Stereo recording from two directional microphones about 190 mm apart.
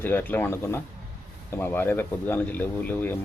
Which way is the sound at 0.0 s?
10° left (ahead or behind).